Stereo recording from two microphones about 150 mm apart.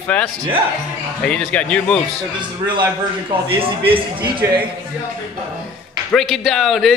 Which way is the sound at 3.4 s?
35° right (ahead or behind).